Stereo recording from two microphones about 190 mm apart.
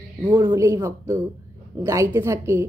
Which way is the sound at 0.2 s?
25° right (ahead or behind).